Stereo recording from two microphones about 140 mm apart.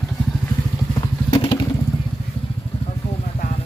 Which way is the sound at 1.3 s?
35° left (ahead or behind).